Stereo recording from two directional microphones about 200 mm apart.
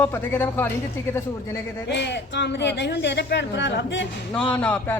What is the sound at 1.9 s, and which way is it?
A woman's voice, 60° left (ahead or behind).